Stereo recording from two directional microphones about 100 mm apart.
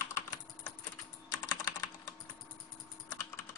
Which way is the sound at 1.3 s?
35° left (ahead or behind).